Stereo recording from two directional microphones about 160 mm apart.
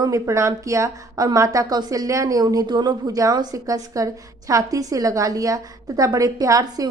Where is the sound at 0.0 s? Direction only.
20° right (ahead or behind).